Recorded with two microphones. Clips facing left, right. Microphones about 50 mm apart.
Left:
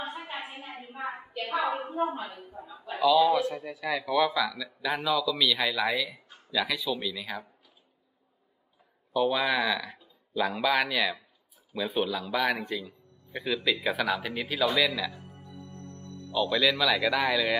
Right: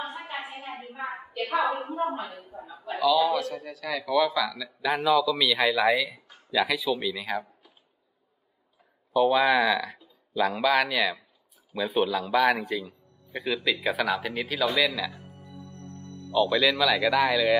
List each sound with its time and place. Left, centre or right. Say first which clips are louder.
0.4 s a sound: right 3 dB; centre
1.1 s a man's voice: right 5 dB; centre
3.3 s a man's voice: left 1 dB; centre
9.1 s a man's voice: right 5 dB; centre
15.9 s music: right 2 dB; right
16.3 s a man's voice: right 3 dB; centre